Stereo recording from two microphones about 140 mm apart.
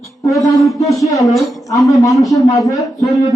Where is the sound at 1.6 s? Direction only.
25° left (ahead or behind).